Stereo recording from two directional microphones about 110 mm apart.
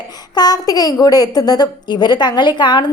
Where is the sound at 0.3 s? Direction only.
35° left (ahead or behind).